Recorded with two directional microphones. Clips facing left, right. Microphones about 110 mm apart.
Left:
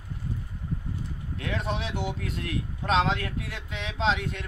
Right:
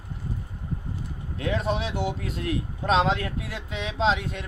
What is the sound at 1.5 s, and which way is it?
Speech, 35° right (ahead or behind).